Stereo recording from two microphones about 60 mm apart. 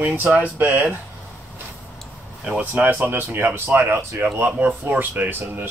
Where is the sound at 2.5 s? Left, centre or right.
Right.